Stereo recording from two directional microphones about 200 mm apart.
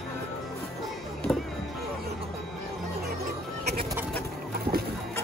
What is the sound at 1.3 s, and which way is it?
Music, centre (ahead or behind).